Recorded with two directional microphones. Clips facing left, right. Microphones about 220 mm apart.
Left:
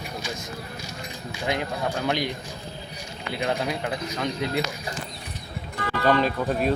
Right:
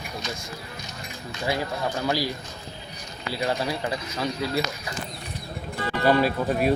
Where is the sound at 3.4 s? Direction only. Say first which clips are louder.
Even; centre (ahead or behind).